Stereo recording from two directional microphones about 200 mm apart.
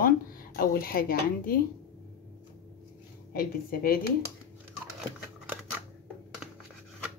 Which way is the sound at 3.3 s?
45° left (ahead or behind).